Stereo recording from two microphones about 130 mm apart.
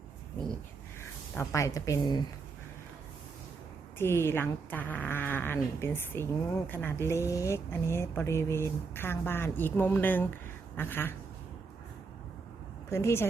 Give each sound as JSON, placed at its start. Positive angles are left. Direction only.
{"t": 1.4, "sound": "a woman's voice", "side_deg": 25}
{"t": 3.9, "sound": "speech", "side_deg": 20}
{"t": 12.9, "sound": "a woman's voice", "side_deg": 20}